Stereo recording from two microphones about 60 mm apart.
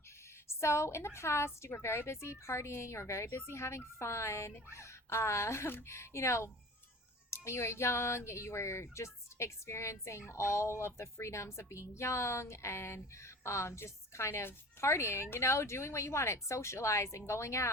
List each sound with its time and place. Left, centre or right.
0.4 s speech: left